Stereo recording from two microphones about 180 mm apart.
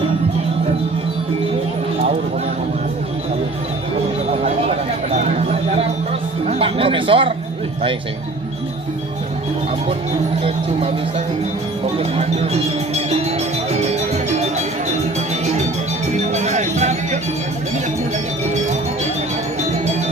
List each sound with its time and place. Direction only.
5.1 s a sound: 40° right (ahead or behind)
6.5 s music: 30° right (ahead or behind)
11.9 s speech: 35° right (ahead or behind)
12.9 s music: 35° right (ahead or behind)
16.3 s music: 40° right (ahead or behind)